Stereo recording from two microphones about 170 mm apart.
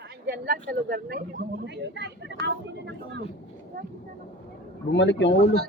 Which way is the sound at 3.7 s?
55° right (ahead or behind).